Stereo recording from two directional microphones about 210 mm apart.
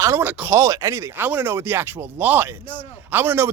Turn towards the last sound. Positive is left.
turn(degrees=-10)  # may be behind; listen again after turning